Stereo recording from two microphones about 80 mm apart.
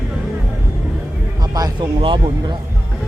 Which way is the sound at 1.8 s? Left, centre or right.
Right.